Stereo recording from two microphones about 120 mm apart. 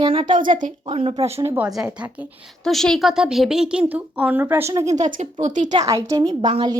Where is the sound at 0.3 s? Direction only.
90° right.